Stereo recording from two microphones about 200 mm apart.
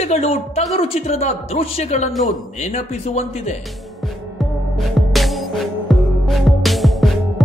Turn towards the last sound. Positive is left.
turn(degrees=0)  # may be behind; listen again after turning